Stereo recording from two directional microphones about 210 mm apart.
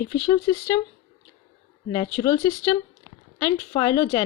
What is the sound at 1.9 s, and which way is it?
A woman's voice, 20° left (ahead or behind).